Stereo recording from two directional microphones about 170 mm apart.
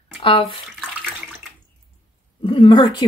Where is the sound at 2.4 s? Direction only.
30° left (ahead or behind).